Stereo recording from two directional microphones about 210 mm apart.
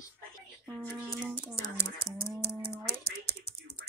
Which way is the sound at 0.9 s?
5° right (ahead or behind).